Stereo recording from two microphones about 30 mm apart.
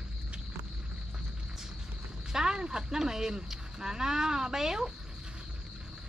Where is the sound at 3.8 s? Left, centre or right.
Right.